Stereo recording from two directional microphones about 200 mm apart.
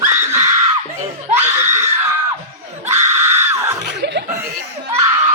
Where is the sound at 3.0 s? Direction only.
10° right (ahead or behind).